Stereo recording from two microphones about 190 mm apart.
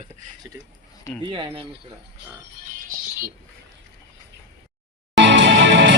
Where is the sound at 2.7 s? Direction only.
50° right (ahead or behind).